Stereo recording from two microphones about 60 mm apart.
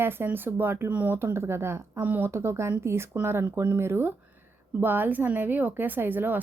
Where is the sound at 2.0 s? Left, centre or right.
Right.